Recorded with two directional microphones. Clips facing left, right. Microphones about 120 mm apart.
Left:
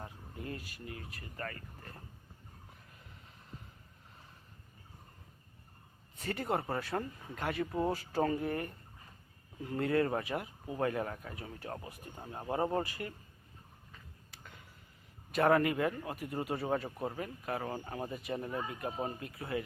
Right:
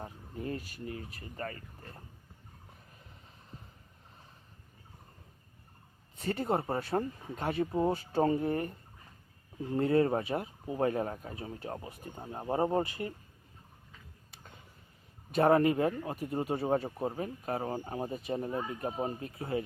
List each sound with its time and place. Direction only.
0.0 s speech: 30° right (ahead or behind)
6.1 s speech: 25° right (ahead or behind)
15.3 s speech: 25° right (ahead or behind)